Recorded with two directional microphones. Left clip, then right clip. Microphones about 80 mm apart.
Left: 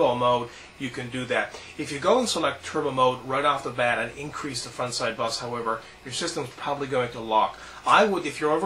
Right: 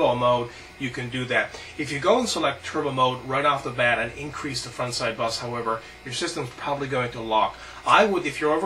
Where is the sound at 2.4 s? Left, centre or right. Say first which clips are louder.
Right 1 dB; centre.